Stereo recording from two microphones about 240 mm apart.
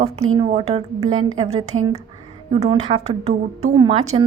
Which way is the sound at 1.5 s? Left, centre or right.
Right.